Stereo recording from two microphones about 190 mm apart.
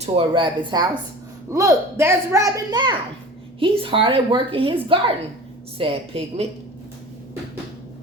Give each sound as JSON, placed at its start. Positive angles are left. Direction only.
{"t": 0.0, "sound": "a woman's voice", "side_deg": -25}